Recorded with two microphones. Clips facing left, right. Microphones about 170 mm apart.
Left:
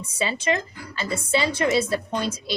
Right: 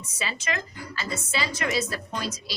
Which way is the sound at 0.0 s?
30° left (ahead or behind).